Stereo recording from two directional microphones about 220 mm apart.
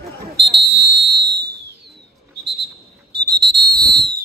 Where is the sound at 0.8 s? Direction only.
45° right (ahead or behind).